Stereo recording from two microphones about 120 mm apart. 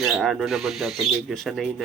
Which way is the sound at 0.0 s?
Centre (ahead or behind).